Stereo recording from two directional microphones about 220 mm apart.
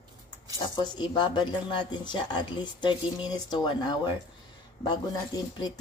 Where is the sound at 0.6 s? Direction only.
20° left (ahead or behind).